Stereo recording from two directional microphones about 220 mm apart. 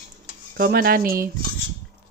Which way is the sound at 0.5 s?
40° right (ahead or behind).